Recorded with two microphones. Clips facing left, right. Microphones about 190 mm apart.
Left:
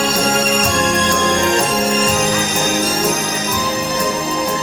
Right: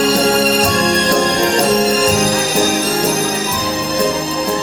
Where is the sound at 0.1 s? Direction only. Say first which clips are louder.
Right 4 dB; 35° right (ahead or behind).